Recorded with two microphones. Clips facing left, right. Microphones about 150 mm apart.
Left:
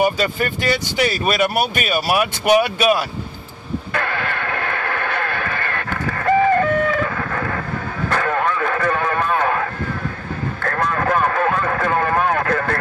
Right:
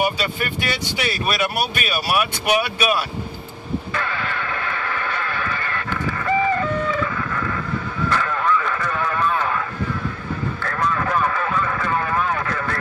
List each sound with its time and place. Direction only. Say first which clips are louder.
0.2 s speech: left 4 dB; 45° left (ahead or behind)
3.9 s radio: left 3 dB; 60° left (ahead or behind)
8.1 s horse: left 2 dB; 55° left (ahead or behind)
10.6 s a sound: left 3 dB; 55° left (ahead or behind)